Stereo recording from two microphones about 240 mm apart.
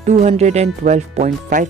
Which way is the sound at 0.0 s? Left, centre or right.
Right.